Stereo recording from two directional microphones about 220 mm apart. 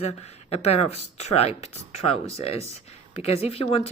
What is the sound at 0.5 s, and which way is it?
Speech, 30° left (ahead or behind).